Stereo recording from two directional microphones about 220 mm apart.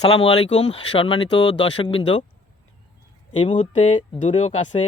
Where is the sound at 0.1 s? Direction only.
25° left (ahead or behind).